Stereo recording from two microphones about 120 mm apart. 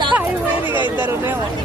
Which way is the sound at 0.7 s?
45° left (ahead or behind).